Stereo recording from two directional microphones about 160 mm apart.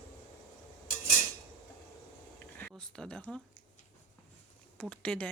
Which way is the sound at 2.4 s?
10° left (ahead or behind).